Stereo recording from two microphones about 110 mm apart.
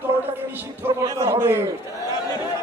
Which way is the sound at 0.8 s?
20° right (ahead or behind).